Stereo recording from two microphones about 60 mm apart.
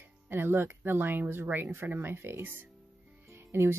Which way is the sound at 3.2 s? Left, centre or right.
Right.